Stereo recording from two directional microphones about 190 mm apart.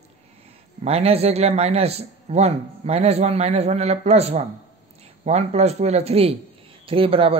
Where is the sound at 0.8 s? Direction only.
30° right (ahead or behind).